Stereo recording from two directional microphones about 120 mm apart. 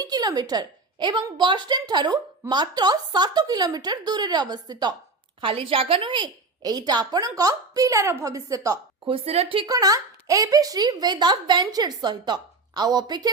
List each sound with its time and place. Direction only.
0.0 s a woman's voice: 35° right (ahead or behind)
5.4 s a woman's voice: 50° right (ahead or behind); by 8.8 s 30° right (ahead or behind)
9.0 s a woman's voice: 50° right (ahead or behind)
9.6 s a woman's voice: 30° right (ahead or behind)